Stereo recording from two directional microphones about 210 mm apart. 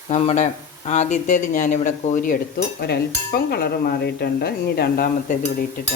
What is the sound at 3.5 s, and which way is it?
Speech, 50° left (ahead or behind).